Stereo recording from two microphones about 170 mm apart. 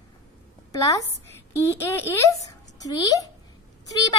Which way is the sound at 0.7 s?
20° left (ahead or behind).